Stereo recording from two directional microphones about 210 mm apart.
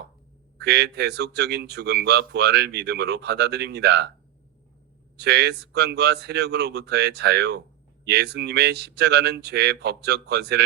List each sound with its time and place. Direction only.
0.6 s speech: 50° right (ahead or behind)
5.1 s speech: 50° right (ahead or behind)